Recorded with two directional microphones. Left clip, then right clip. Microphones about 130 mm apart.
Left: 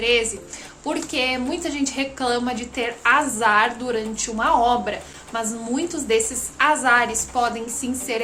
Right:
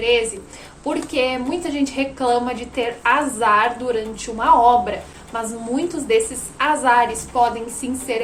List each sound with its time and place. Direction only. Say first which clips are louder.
0.0 s a woman's voice: right 2 dB; 35° left (ahead or behind)